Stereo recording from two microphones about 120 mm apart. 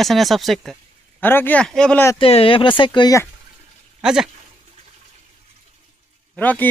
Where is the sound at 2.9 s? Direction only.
30° left (ahead or behind).